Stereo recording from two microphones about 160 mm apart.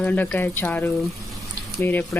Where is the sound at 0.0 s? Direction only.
10° left (ahead or behind).